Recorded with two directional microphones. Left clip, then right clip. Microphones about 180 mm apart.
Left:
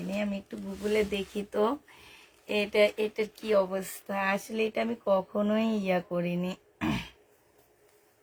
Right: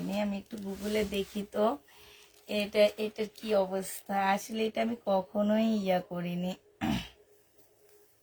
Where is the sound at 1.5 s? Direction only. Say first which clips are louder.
Left 1 dB; 35° left (ahead or behind).